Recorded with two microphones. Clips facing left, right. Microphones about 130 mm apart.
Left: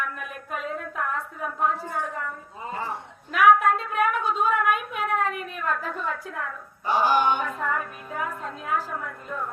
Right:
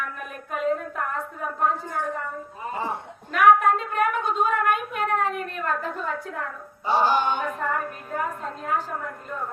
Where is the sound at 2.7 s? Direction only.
20° right (ahead or behind).